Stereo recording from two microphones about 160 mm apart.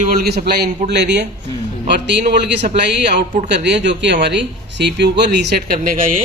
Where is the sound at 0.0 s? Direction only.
65° right (ahead or behind).